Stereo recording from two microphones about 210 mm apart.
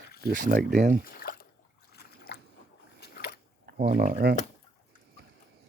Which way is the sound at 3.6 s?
45° right (ahead or behind).